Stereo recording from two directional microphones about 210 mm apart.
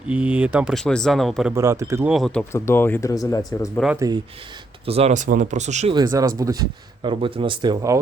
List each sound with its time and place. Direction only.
0.1 s speech: 5° right (ahead or behind)
1.5 s speech: 15° right (ahead or behind)
2.1 s speech: centre (ahead or behind)
4.9 s speech: 30° right (ahead or behind)
5.9 s speech: 20° right (ahead or behind)